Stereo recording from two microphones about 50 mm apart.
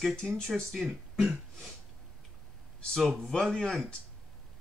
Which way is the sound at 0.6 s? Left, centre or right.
Centre.